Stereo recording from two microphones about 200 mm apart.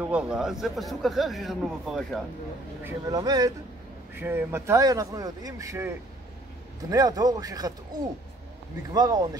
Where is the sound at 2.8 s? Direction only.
20° right (ahead or behind).